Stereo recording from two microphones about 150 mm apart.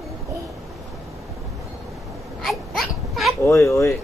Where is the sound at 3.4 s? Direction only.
20° left (ahead or behind).